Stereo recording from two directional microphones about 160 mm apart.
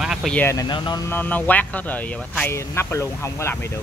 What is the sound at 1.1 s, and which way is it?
Speech, 10° left (ahead or behind).